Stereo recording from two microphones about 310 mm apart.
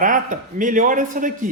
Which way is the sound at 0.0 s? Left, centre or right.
Right.